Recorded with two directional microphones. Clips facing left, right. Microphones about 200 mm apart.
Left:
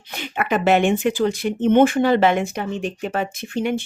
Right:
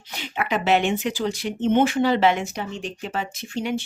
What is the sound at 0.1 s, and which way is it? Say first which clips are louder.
Speech: left 3 dB; 55° left (ahead or behind).